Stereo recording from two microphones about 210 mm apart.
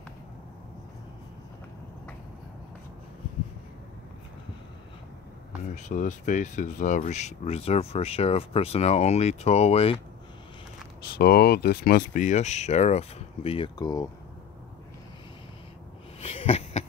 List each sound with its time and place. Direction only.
5.8 s speech: 35° left (ahead or behind)
11.1 s speech: 50° left (ahead or behind); by 14.0 s 20° left (ahead or behind)
16.2 s a sound: 30° left (ahead or behind)